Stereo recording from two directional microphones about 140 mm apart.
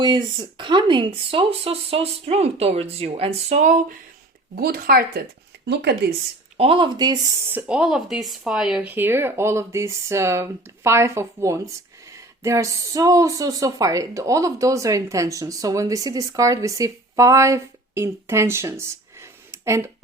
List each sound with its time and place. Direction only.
0.0 s speech: 35° right (ahead or behind); by 3.9 s 60° right (ahead or behind)
4.5 s speech: 90° right
6.6 s speech: 40° right (ahead or behind)
7.5 s speech: 5° right (ahead or behind)